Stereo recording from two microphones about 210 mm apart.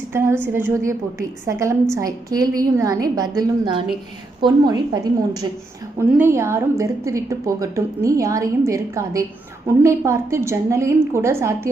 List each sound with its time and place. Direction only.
0.1 s a woman's voice: 10° right (ahead or behind)